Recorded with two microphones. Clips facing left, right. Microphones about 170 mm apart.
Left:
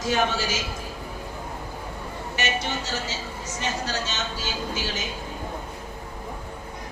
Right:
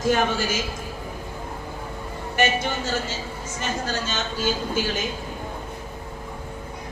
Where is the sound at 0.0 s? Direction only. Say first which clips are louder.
Right 3 dB; 50° right (ahead or behind).